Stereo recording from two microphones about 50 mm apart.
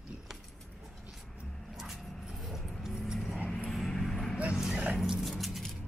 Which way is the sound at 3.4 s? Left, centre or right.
Centre.